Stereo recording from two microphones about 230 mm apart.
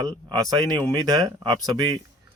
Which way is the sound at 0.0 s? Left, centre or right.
Centre.